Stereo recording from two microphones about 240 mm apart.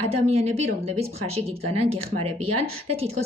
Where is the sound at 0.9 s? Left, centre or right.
Right.